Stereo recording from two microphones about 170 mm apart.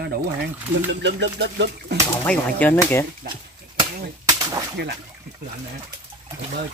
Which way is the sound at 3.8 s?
25° right (ahead or behind).